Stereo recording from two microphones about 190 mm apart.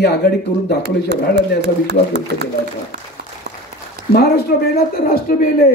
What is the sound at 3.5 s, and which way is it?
Applause, 60° right (ahead or behind).